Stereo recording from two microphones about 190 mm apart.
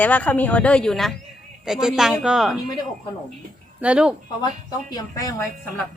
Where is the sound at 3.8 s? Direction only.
5° right (ahead or behind).